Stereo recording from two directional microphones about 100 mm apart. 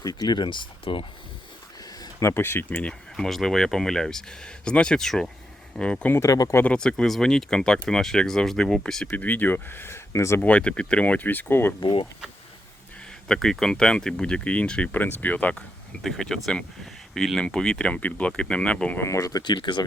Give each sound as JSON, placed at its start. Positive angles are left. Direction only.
{"t": 0.0, "sound": "speech", "side_deg": 40}
{"t": 2.0, "sound": "a sound", "side_deg": 35}
{"t": 2.3, "sound": "speech", "side_deg": 25}
{"t": 3.2, "sound": "speech", "side_deg": 5}
{"t": 6.1, "sound": "speech", "side_deg": 35}
{"t": 6.6, "sound": "speech", "side_deg": 10}
{"t": 9.0, "sound": "speech", "side_deg": 15}
{"t": 10.4, "sound": "speech", "side_deg": 10}
{"t": 11.8, "sound": "speech", "side_deg": 50}
{"t": 13.2, "sound": "speech", "side_deg": 5}
{"t": 18.9, "sound": "speech", "side_deg": 30}
{"t": 19.4, "sound": "speech", "side_deg": 50}